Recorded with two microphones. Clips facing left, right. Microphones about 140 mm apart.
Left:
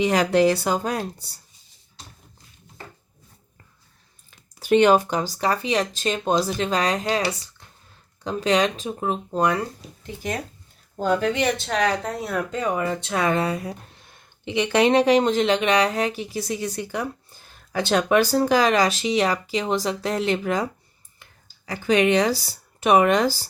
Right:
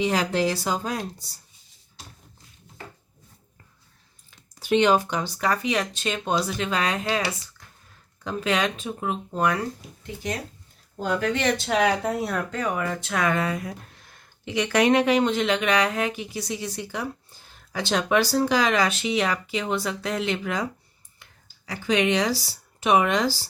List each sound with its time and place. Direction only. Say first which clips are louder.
0.0 s speech: left 5 dB; 65° left (ahead or behind)
4.3 s speech: left 4 dB; 45° left (ahead or behind); by 9.6 s 30° left (ahead or behind)
11.0 s speech: left 4 dB; 35° left (ahead or behind)
11.5 s speech: right 1 dB; 5° right (ahead or behind)
12.5 s speech: left 3 dB; 25° left (ahead or behind); by 20.7 s 40° left (ahead or behind)
21.7 s speech: left 4 dB; 45° left (ahead or behind)